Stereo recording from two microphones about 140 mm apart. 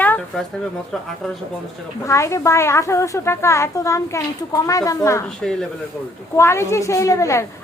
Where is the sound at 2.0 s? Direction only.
20° left (ahead or behind).